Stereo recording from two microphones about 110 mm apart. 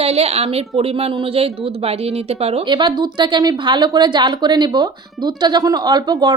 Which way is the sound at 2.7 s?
45° right (ahead or behind).